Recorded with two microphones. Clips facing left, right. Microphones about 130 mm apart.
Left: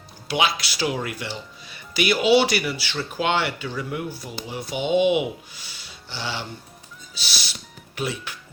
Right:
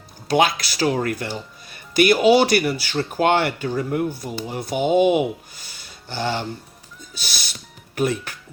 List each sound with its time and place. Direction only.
0.3 s speech: 45° right (ahead or behind)
7.1 s music: 50° right (ahead or behind)
7.9 s speech: 50° right (ahead or behind)